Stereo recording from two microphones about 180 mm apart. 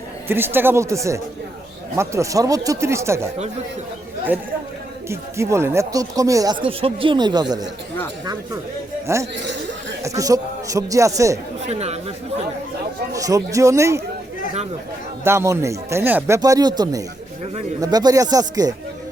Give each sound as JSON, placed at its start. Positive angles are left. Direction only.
{"t": 0.3, "sound": "speech", "side_deg": -10}
{"t": 4.3, "sound": "speech", "side_deg": -10}
{"t": 9.1, "sound": "speech", "side_deg": -15}
{"t": 11.6, "sound": "speech", "side_deg": -35}
{"t": 13.1, "sound": "speech", "side_deg": -20}
{"t": 15.2, "sound": "speech", "side_deg": -15}